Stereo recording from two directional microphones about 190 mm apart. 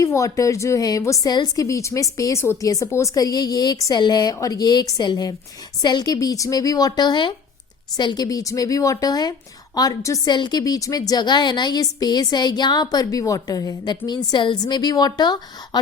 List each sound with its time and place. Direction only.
0.0 s a woman's voice: 15° left (ahead or behind)